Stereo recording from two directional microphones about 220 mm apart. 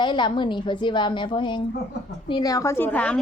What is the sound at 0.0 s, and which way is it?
A woman's voice, 20° left (ahead or behind).